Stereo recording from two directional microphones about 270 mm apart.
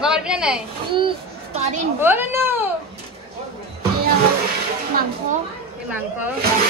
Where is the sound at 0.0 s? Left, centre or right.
Centre.